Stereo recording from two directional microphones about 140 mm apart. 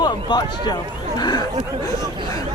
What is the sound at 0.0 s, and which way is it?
Speech, 30° left (ahead or behind).